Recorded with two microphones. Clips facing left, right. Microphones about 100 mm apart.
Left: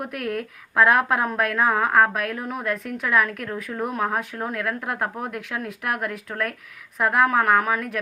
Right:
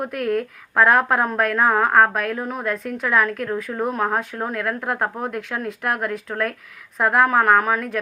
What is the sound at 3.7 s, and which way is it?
Speech, 20° right (ahead or behind).